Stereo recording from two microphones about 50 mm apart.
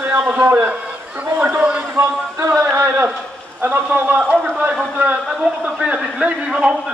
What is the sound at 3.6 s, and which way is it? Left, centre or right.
Speech, right.